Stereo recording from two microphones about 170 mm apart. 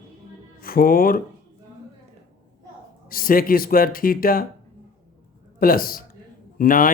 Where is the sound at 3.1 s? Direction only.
55° left (ahead or behind).